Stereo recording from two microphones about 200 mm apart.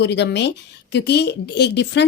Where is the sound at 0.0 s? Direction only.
60° left (ahead or behind).